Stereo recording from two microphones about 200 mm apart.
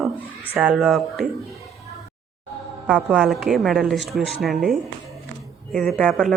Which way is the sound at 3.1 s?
Centre (ahead or behind).